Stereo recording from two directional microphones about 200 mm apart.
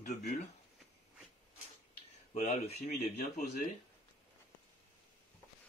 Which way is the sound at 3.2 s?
50° left (ahead or behind).